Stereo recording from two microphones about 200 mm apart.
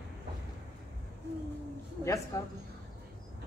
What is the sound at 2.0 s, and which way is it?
Speech, 15° left (ahead or behind).